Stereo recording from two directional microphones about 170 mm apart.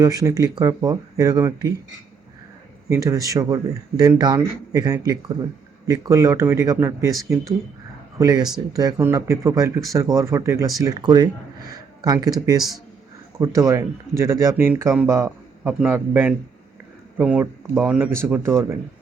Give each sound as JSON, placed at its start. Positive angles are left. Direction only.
{"t": 0.0, "sound": "speech", "side_deg": -20}
{"t": 2.9, "sound": "speech", "side_deg": -20}